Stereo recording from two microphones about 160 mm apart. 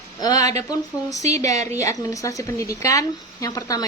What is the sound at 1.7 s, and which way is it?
A woman's voice, 20° left (ahead or behind).